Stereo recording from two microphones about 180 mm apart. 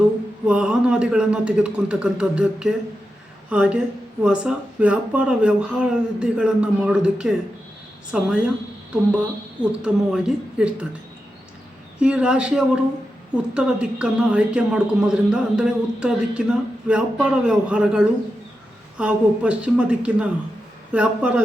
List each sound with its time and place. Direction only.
0.4 s a woman's voice: 5° right (ahead or behind)
9.6 s a woman's voice: 5° right (ahead or behind)
11.9 s a woman's voice: 5° right (ahead or behind)